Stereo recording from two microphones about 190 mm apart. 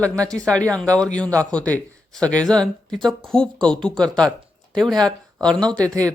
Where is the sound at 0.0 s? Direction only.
5° left (ahead or behind).